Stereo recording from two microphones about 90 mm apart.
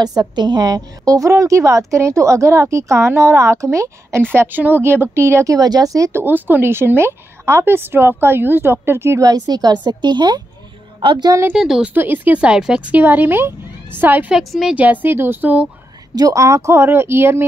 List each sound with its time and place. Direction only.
0.0 s a woman's voice: 45° right (ahead or behind)
4.2 s a woman's voice: 25° right (ahead or behind); by 6.1 s 40° right (ahead or behind)
6.1 s a woman's voice: 20° right (ahead or behind)
9.2 s a woman's voice: 45° right (ahead or behind)
11.5 s a woman's voice: 5° right (ahead or behind)
11.9 s a woman's voice: 20° right (ahead or behind)
14.3 s a woman's voice: 5° right (ahead or behind)
14.8 s a woman's voice: 20° right (ahead or behind)
16.2 s a woman's voice: 40° right (ahead or behind)